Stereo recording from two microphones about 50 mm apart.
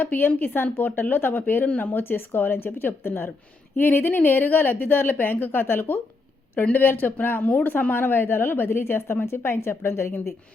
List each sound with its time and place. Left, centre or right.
0.0 s a woman's voice: left
1.6 s a woman's voice: left
1.9 s a woman's voice: left
8.8 s speech: left